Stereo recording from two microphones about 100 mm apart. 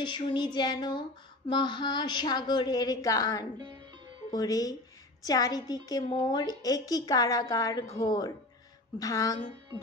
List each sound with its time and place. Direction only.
0.0 s speech: 50° left (ahead or behind)
3.5 s speech: 50° right (ahead or behind)
4.3 s a woman's voice: 40° left (ahead or behind)